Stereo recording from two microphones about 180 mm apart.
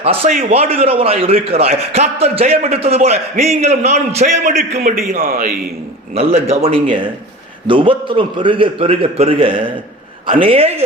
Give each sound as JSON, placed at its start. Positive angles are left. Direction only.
{"t": 0.0, "sound": "a man's voice", "side_deg": -30}
{"t": 6.1, "sound": "a man's voice", "side_deg": -35}